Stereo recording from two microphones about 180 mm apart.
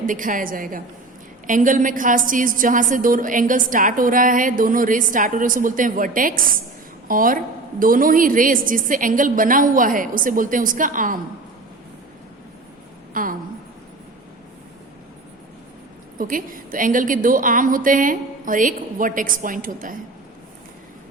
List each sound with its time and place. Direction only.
0.0 s a woman's voice: 45° right (ahead or behind)
13.2 s a woman's voice: 50° right (ahead or behind)
16.1 s a woman's voice: 50° right (ahead or behind)